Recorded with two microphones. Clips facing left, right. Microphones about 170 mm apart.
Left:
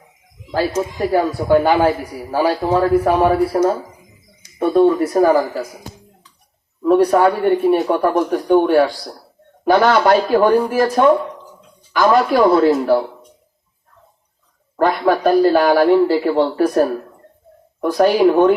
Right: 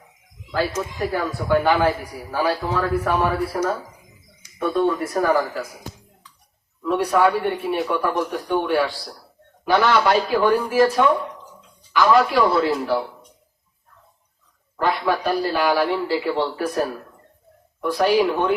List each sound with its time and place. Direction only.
0.5 s a man's voice: 35° left (ahead or behind)
5.1 s speech: 30° left (ahead or behind)
6.8 s a man's voice: 40° left (ahead or behind)
14.8 s a man's voice: 45° left (ahead or behind)